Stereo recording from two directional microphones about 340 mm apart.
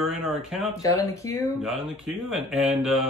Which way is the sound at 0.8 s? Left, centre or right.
Centre.